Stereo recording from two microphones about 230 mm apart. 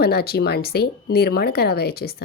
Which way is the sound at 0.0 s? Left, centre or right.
Left.